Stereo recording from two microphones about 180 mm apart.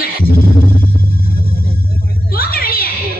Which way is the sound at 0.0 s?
55° left (ahead or behind).